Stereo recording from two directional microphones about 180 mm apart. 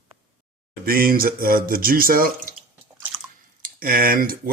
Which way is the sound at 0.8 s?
55° right (ahead or behind).